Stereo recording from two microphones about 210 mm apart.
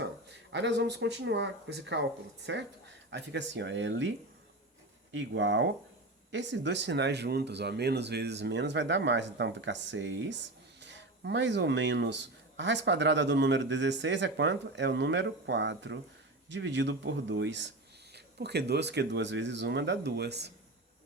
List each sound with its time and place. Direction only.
0.0 s speech: 55° right (ahead or behind)
5.1 s speech: 60° right (ahead or behind)